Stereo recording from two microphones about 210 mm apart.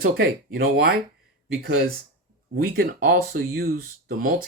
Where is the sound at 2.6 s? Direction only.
45° right (ahead or behind).